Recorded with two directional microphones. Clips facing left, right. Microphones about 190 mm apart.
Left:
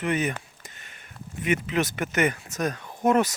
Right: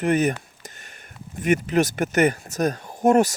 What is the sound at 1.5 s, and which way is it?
Speech, 40° right (ahead or behind).